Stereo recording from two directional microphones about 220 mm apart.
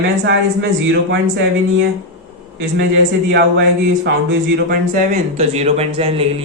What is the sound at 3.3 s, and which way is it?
Speech, 50° right (ahead or behind).